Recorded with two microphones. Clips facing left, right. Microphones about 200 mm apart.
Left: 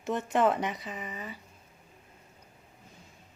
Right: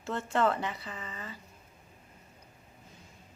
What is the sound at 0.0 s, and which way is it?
A woman's voice, 15° left (ahead or behind).